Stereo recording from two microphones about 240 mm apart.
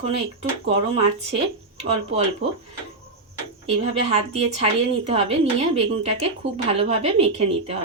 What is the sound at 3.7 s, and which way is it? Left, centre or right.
A woman's voice, right.